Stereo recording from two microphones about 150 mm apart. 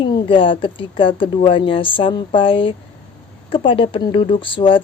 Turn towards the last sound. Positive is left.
turn(degrees=35)  # may be behind; listen again after turning